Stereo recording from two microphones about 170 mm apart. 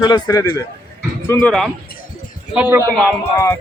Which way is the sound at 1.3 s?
5° left (ahead or behind).